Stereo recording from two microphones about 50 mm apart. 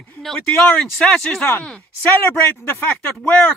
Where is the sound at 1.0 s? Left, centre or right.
Left.